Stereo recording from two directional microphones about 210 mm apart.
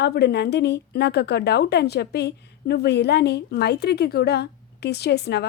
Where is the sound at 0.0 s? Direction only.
50° left (ahead or behind).